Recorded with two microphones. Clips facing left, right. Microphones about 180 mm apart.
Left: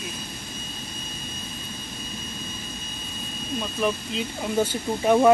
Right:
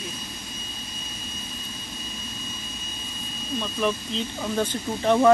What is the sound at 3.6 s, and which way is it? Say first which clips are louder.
Speech: even; 10° left (ahead or behind).